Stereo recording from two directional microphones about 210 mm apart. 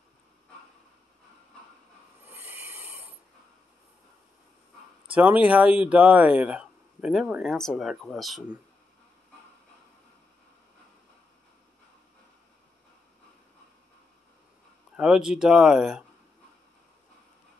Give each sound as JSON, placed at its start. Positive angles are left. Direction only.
{"t": 2.2, "sound": "a sound", "side_deg": -10}
{"t": 5.1, "sound": "speech", "side_deg": -10}
{"t": 15.0, "sound": "speech", "side_deg": -5}